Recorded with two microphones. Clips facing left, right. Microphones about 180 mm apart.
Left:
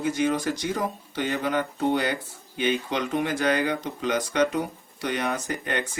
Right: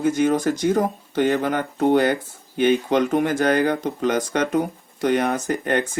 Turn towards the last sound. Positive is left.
turn(degrees=-45)  # may be behind; listen again after turning